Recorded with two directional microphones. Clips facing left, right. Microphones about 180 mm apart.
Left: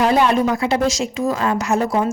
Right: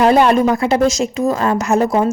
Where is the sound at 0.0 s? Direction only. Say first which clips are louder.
Right 4 dB; 50° right (ahead or behind).